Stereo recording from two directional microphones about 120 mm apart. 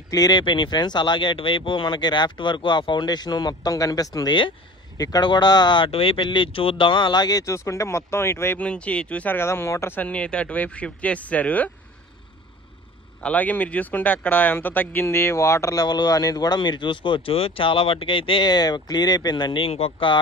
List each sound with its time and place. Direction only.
0.1 s speech: 35° left (ahead or behind)
8.6 s speech: 10° left (ahead or behind)
13.2 s speech: 10° left (ahead or behind); by 20.2 s 45° left (ahead or behind)